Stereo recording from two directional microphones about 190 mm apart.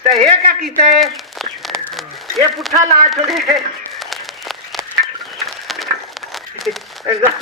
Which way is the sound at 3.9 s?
Centre (ahead or behind).